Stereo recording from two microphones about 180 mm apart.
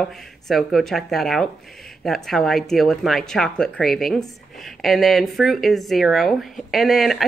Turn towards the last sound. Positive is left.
turn(degrees=0)  # may be behind; listen again after turning